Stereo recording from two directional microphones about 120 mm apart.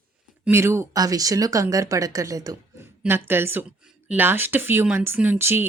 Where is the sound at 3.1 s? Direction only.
20° right (ahead or behind).